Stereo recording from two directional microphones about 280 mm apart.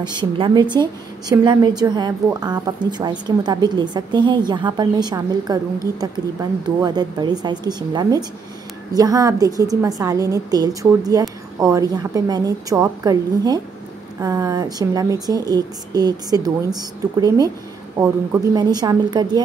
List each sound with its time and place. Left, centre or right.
0.0 s a woman's voice: centre
6.8 s a woman's voice: centre
17.9 s a woman's voice: centre